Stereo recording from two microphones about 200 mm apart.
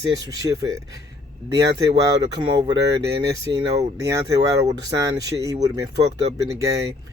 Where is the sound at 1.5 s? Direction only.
20° right (ahead or behind).